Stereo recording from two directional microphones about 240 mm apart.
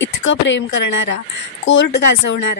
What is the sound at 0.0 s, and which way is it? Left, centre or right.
Speech, left.